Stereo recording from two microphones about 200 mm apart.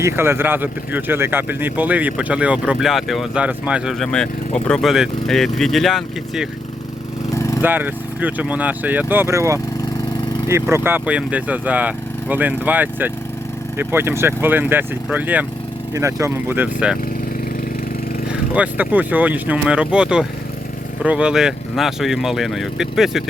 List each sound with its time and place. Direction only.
0.0 s speech: 10° right (ahead or behind)
7.3 s lawn mower: 15° left (ahead or behind)
7.6 s speech: 10° right (ahead or behind)
18.3 s speech: 5° right (ahead or behind)